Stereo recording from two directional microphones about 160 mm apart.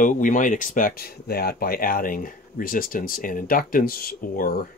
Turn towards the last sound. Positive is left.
turn(degrees=60)  # may be behind; listen again after turning